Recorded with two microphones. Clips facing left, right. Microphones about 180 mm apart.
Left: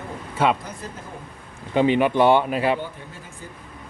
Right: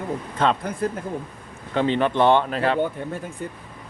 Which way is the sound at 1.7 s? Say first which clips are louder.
Left 2 dB; 15° left (ahead or behind).